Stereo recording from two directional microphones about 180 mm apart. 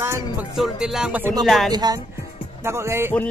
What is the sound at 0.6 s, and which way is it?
Music, 5° right (ahead or behind).